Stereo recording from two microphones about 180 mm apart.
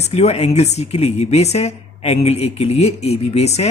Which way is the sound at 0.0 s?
35° left (ahead or behind).